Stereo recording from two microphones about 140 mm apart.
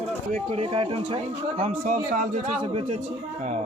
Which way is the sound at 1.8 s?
65° right (ahead or behind).